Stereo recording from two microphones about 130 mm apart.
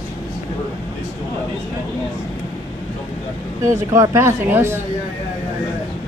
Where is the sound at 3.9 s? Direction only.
20° right (ahead or behind).